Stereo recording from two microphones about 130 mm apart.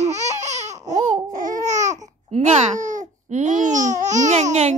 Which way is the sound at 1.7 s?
65° right (ahead or behind).